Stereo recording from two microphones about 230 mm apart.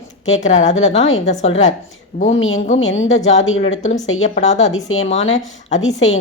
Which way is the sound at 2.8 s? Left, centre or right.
Left.